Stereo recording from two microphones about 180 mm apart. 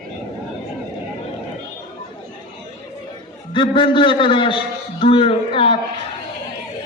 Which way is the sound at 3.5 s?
25° left (ahead or behind).